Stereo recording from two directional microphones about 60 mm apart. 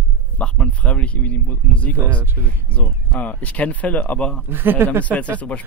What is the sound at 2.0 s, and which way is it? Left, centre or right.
Speech, right.